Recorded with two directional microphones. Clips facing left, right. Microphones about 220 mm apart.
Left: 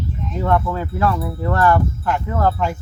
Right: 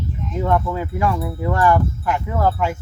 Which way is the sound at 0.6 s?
15° right (ahead or behind).